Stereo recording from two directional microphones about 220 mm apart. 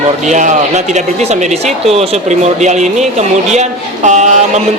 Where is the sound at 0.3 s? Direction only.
35° right (ahead or behind).